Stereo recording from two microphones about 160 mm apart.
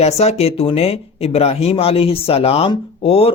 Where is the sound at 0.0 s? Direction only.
40° left (ahead or behind).